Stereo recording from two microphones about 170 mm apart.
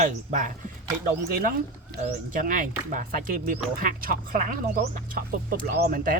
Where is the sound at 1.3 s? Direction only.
60° right (ahead or behind).